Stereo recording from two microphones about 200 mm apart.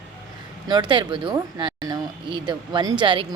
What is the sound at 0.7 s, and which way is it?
A woman's voice, 25° right (ahead or behind).